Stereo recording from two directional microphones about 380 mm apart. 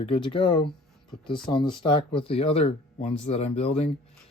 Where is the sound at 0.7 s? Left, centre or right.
Centre.